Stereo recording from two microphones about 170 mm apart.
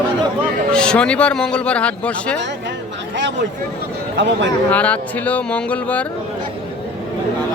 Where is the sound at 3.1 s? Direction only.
90° right.